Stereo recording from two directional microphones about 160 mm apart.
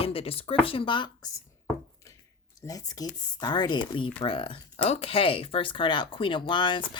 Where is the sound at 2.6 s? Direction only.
25° left (ahead or behind).